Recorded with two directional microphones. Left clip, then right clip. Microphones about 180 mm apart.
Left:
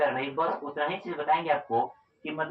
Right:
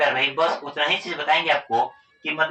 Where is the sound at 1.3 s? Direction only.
15° right (ahead or behind).